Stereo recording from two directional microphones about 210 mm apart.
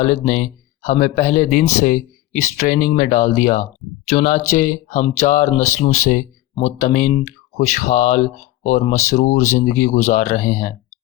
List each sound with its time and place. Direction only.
0.0 s speech: 35° left (ahead or behind)